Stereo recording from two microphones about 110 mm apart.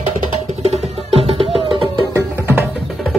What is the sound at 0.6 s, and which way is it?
Music, 65° right (ahead or behind).